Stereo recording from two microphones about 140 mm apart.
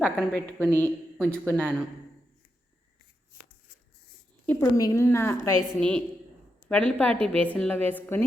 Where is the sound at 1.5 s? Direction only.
10° left (ahead or behind).